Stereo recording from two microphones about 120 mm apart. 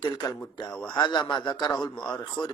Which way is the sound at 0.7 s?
5° left (ahead or behind).